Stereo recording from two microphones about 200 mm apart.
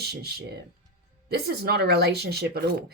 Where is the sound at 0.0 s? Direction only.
55° right (ahead or behind).